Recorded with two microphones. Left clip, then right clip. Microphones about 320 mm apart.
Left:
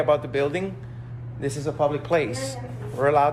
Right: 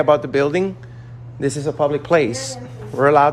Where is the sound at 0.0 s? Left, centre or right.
Right.